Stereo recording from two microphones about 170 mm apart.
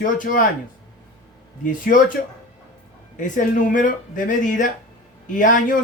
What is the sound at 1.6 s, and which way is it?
Speech, 50° left (ahead or behind).